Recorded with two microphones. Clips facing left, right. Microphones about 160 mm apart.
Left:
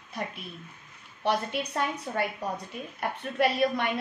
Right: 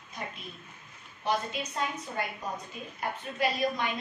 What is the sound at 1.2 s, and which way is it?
A woman's voice, 65° left (ahead or behind).